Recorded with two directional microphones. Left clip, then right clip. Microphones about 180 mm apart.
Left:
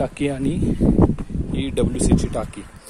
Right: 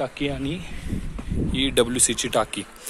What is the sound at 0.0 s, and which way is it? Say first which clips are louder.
Speech: left 4 dB; 45° left (ahead or behind).